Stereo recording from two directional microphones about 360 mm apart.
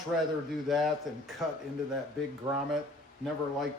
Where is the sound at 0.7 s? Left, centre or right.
Centre.